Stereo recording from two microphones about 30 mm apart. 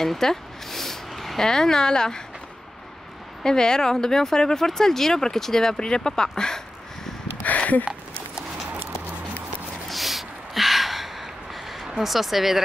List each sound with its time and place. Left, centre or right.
0.0 s a sound: centre
1.4 s speech: centre
3.4 s speech: left
7.4 s a sound: left
9.8 s gasp: centre
12.0 s speech: centre